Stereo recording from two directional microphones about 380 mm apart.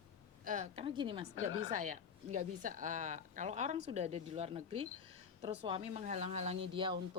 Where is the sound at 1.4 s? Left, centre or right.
Left.